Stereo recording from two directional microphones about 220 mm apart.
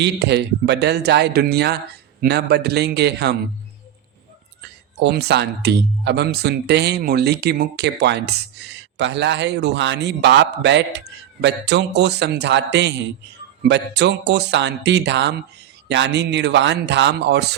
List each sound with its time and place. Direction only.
0.0 s speech: 50° right (ahead or behind)
4.9 s speech: 50° right (ahead or behind)